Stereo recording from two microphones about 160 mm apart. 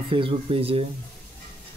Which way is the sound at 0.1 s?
35° right (ahead or behind).